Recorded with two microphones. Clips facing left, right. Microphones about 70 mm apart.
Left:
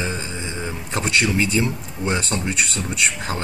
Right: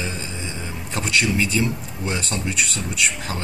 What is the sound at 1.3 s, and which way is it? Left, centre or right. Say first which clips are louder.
A man's voice: left 1 dB; centre.